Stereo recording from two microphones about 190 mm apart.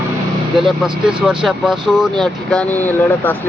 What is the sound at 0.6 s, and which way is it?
Speech, centre (ahead or behind).